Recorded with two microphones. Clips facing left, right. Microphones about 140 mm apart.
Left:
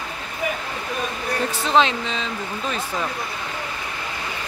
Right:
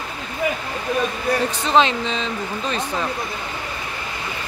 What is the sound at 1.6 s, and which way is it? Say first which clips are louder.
Speech: left 1 dB; centre (ahead or behind).